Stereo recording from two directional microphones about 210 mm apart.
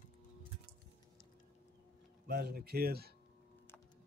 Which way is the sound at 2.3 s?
50° right (ahead or behind).